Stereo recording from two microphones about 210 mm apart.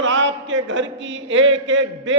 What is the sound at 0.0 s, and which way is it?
Speech, 60° right (ahead or behind).